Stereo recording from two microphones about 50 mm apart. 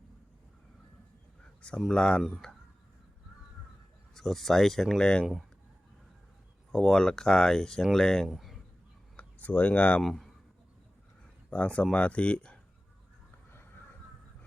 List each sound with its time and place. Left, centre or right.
1.9 s speech: centre
4.1 s speech: centre
5.2 s speech: centre
6.7 s speech: centre
8.3 s a sound: centre
9.1 s speech: left
10.0 s speech: centre
11.5 s speech: left